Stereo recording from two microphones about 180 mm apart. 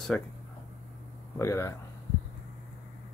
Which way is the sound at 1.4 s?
15° left (ahead or behind).